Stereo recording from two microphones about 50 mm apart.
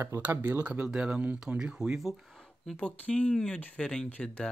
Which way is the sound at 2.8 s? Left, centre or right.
Left.